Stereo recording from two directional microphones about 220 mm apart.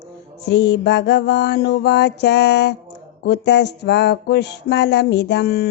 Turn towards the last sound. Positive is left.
turn(degrees=45)  # may be behind; listen again after turning